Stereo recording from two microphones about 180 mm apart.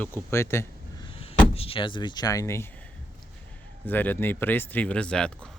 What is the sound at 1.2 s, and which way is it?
Speech, 35° left (ahead or behind).